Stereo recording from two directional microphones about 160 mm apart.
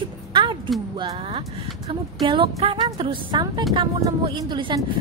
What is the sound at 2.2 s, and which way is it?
Speech, 30° right (ahead or behind).